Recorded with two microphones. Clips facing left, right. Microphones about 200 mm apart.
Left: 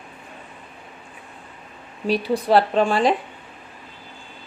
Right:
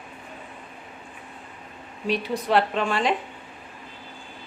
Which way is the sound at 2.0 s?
35° left (ahead or behind).